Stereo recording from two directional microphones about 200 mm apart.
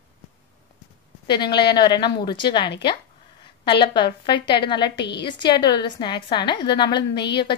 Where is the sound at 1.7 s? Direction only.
20° left (ahead or behind).